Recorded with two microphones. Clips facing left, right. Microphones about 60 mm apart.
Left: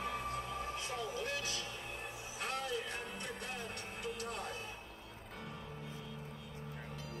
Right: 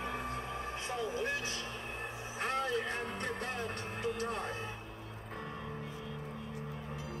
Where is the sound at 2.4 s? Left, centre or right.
Right.